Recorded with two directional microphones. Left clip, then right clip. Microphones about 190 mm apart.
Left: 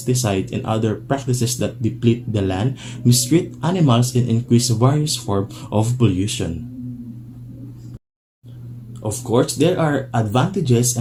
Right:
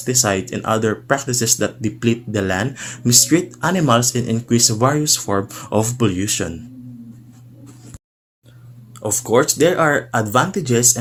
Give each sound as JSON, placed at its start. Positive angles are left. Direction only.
{"t": 0.0, "sound": "speech", "side_deg": -45}
{"t": 9.0, "sound": "speech", "side_deg": -45}